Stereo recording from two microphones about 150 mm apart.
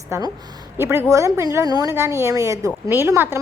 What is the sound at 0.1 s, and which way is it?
A woman's voice, 15° right (ahead or behind).